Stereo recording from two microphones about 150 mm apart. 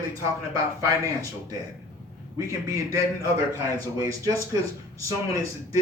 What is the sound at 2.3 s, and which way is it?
A man's voice, 20° right (ahead or behind).